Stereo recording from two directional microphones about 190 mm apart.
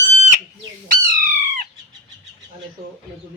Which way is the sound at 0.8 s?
45° right (ahead or behind).